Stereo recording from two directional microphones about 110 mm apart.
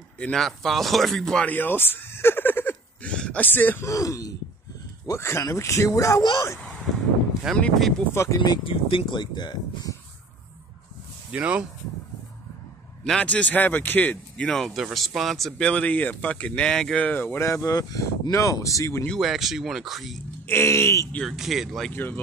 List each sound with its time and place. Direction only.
0.2 s speech: 5° left (ahead or behind)
1.4 s a sound: 15° left (ahead or behind)
3.9 s speech: 30° left (ahead or behind)
7.5 s speech: centre (ahead or behind)
8.1 s speech: 25° left (ahead or behind)
8.4 s speech: 50° left (ahead or behind)
11.3 s speech: 10° right (ahead or behind)
13.0 s speech: 5° left (ahead or behind); by 19.0 s 30° left (ahead or behind)
19.0 s speech: centre (ahead or behind)
20.4 s speech: 25° left (ahead or behind)
21.3 s speech: 5° right (ahead or behind)
21.9 s speech: 20° left (ahead or behind)